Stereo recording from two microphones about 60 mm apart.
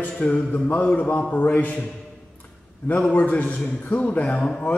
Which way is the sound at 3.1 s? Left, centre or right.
Left.